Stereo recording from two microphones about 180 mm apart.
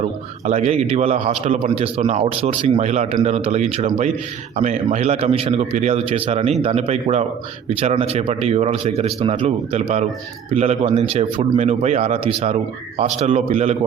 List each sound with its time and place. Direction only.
0.4 s a man's voice: 35° right (ahead or behind)